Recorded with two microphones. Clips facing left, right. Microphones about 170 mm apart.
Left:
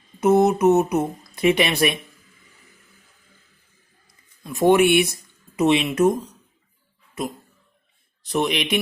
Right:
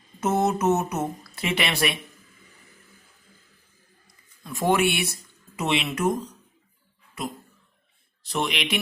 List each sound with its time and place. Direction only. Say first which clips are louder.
0.2 s speech: left 7 dB; 15° left (ahead or behind)
4.4 s speech: left 6 dB; 20° left (ahead or behind)
8.2 s speech: left 5 dB; 20° left (ahead or behind)